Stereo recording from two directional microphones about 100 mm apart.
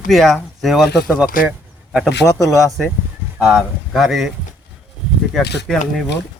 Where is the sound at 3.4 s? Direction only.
Centre (ahead or behind).